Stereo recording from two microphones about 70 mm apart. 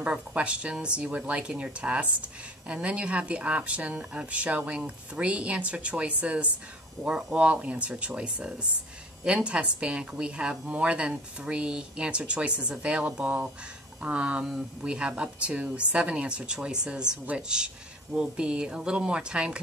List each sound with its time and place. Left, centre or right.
0.0 s a woman's voice: centre